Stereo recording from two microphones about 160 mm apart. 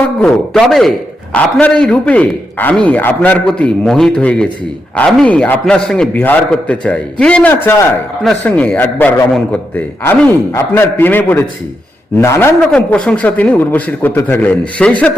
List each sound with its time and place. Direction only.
0.2 s a man's voice: centre (ahead or behind)